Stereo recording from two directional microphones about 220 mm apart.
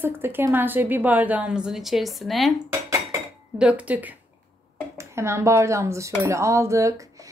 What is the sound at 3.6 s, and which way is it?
Speech, 5° right (ahead or behind).